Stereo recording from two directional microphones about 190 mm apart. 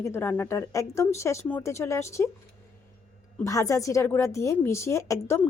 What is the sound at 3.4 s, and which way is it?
Speech, 15° left (ahead or behind).